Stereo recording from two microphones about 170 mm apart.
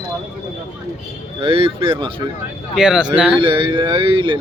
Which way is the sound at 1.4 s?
35° right (ahead or behind).